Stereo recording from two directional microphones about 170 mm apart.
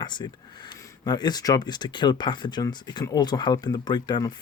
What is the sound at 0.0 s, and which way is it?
Speech, 25° left (ahead or behind).